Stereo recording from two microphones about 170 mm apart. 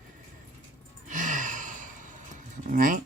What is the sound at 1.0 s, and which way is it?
Sigh, 50° right (ahead or behind).